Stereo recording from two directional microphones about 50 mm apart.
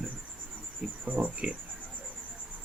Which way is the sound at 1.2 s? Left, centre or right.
Right.